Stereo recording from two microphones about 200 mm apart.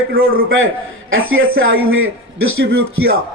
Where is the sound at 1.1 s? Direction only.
90° right.